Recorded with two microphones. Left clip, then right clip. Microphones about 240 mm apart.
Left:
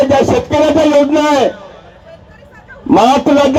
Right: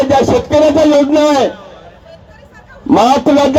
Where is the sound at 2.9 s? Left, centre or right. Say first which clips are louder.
Even; right.